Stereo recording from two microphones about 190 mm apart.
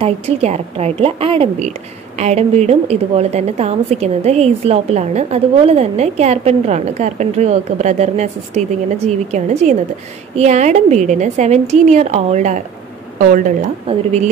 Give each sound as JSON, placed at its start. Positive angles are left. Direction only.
{"t": 0.0, "sound": "a woman's voice", "side_deg": -35}